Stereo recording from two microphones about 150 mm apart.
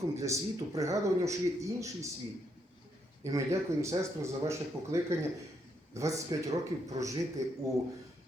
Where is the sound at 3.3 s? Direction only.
20° right (ahead or behind).